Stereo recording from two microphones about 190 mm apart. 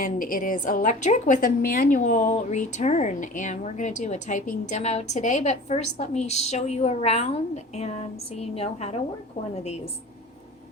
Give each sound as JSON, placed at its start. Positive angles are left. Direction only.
{"t": 0.0, "sound": "a woman's voice", "side_deg": 45}